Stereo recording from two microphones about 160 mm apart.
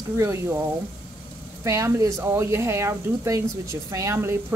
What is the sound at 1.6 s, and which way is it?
A woman's voice, 20° right (ahead or behind).